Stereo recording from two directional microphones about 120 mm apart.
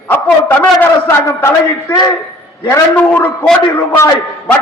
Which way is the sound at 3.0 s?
15° left (ahead or behind).